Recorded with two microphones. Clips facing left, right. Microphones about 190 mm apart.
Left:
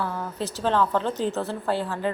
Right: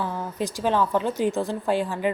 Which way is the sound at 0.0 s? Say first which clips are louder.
Right 1 dB; 15° right (ahead or behind).